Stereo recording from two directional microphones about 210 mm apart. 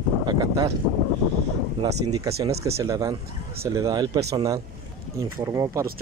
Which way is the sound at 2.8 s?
15° right (ahead or behind).